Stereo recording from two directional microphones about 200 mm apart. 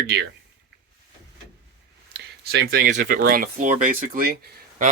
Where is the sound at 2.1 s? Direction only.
55° right (ahead or behind).